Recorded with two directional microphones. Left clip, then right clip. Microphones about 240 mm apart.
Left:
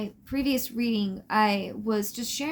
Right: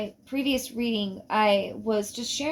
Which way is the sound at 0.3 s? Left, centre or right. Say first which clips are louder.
Even; left.